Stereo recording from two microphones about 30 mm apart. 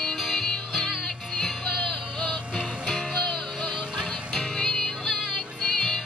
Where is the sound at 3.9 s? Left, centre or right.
Centre.